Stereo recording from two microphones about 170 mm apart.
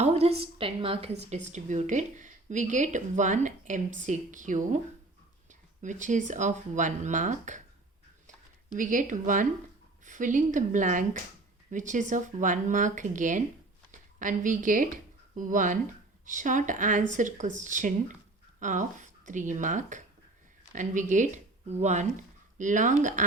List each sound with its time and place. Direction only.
0.0 s a woman's voice: 40° right (ahead or behind)
1.5 s speech: 45° right (ahead or behind)
8.7 s speech: 50° right (ahead or behind)